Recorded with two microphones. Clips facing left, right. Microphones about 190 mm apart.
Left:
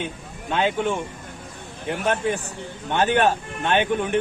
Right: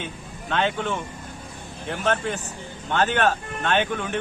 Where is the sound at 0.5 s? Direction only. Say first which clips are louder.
Left 2 dB; 10° left (ahead or behind).